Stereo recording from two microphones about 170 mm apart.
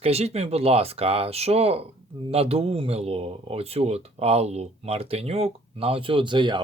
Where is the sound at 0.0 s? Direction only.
35° right (ahead or behind).